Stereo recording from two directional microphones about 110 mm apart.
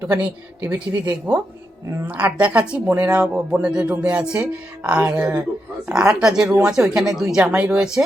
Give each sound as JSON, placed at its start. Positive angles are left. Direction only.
{"t": 0.0, "sound": "speech", "side_deg": -15}
{"t": 2.0, "sound": "speech", "side_deg": -15}